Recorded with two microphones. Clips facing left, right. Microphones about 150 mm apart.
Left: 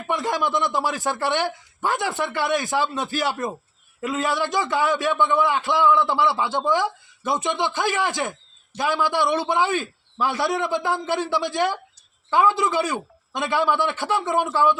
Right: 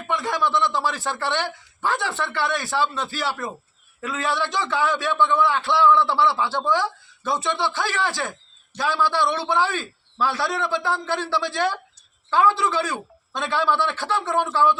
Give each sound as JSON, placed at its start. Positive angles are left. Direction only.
{"t": 0.3, "sound": "a man's voice", "side_deg": 20}
{"t": 1.9, "sound": "a man's voice", "side_deg": 45}
{"t": 2.1, "sound": "a man's voice", "side_deg": 15}
{"t": 4.4, "sound": "a man's voice", "side_deg": 45}
{"t": 4.7, "sound": "a man's voice", "side_deg": 20}